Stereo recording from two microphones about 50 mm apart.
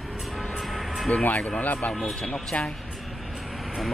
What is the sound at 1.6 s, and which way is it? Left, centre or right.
Speech, left.